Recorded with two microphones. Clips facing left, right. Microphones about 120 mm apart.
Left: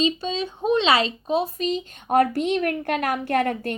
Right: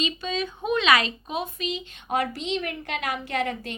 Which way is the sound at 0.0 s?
30° left (ahead or behind).